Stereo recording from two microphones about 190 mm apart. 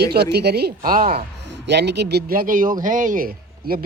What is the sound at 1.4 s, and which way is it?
A man's voice, 65° right (ahead or behind).